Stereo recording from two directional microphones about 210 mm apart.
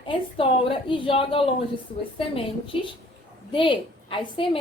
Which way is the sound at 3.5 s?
25° left (ahead or behind).